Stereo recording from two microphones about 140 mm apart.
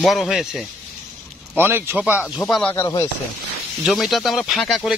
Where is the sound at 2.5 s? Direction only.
5° left (ahead or behind).